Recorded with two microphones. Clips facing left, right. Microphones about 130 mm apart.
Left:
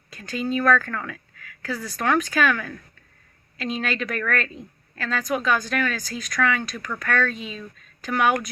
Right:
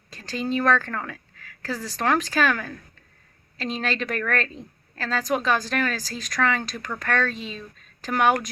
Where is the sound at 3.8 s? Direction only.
35° right (ahead or behind).